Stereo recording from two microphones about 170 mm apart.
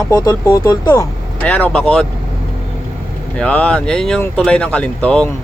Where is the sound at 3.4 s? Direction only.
10° left (ahead or behind).